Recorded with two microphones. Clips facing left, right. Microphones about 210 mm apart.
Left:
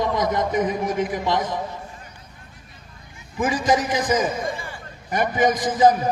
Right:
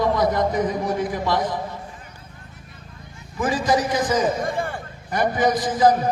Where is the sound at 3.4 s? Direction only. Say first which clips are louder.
Even; 20° left (ahead or behind).